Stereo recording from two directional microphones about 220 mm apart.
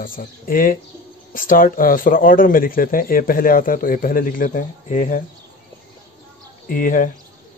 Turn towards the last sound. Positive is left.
turn(degrees=35)  # may be behind; listen again after turning